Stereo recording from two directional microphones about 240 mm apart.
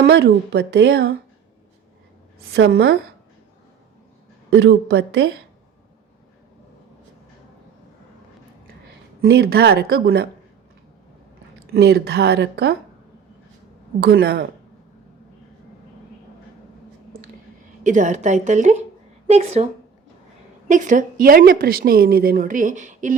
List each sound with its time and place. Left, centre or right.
0.0 s speech: right
2.5 s speech: right
4.5 s speech: right
9.2 s a woman's voice: right
11.7 s speech: right
14.0 s a woman's voice: right
17.8 s a woman's voice: right
20.7 s a woman's voice: right